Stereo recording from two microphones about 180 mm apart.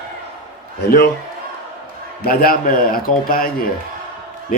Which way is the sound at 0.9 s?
60° left (ahead or behind).